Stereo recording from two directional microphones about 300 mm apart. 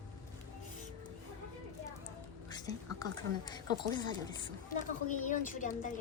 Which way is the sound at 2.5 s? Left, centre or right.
Centre.